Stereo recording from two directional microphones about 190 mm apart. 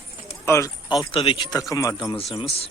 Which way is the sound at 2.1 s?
30° left (ahead or behind).